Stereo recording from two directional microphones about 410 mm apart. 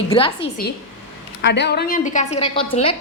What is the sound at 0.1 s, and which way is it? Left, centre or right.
Speech, centre.